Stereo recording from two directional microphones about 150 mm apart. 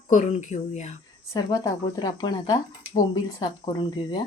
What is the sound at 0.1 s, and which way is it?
Speech, 55° left (ahead or behind).